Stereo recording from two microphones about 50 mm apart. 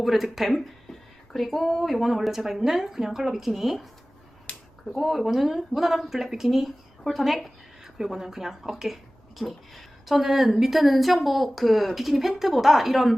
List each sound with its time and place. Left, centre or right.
0.0 s speech: centre
4.5 s a sound: left
4.9 s speech: centre